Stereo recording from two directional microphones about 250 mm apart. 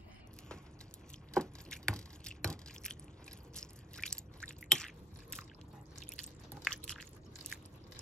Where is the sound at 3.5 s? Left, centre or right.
Centre.